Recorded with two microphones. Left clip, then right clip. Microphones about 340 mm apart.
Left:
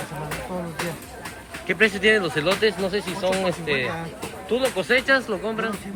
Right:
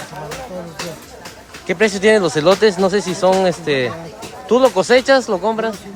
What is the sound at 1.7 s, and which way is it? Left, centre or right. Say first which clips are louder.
Speech: right 5 dB; centre.